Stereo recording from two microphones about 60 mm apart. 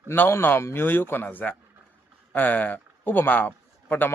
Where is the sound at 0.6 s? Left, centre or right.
Left.